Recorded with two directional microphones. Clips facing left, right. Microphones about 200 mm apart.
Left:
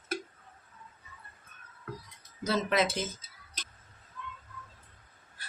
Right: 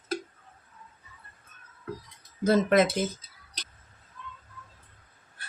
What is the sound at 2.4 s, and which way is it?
Speech, 50° right (ahead or behind).